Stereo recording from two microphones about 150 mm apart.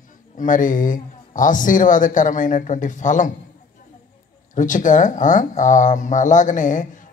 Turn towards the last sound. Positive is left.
turn(degrees=60)  # may be behind; listen again after turning